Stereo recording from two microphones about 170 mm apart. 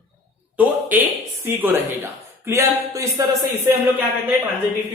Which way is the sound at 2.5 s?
20° right (ahead or behind).